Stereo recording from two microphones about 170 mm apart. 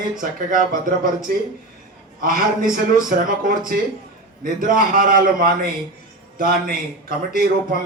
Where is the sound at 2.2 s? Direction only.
55° right (ahead or behind).